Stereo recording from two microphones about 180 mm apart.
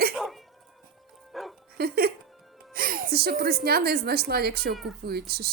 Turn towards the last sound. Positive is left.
turn(degrees=-60)  # may be behind; listen again after turning